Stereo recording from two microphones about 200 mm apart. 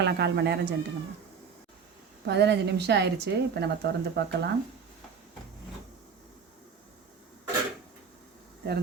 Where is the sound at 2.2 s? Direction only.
55° right (ahead or behind).